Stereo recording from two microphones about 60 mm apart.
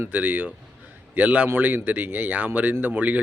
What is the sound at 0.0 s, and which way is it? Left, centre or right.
Speech, right.